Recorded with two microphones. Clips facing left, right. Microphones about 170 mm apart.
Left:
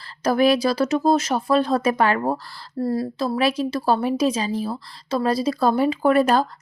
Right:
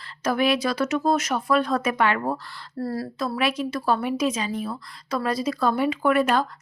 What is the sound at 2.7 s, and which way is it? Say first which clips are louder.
A woman's voice: left 5 dB; 20° left (ahead or behind).